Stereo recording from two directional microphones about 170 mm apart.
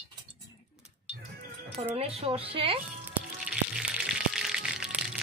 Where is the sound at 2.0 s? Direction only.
35° right (ahead or behind).